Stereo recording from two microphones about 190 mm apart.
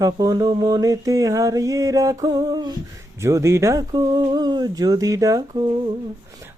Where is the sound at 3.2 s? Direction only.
15° right (ahead or behind).